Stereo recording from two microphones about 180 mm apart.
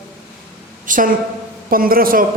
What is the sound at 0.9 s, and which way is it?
A woman's voice, 50° right (ahead or behind).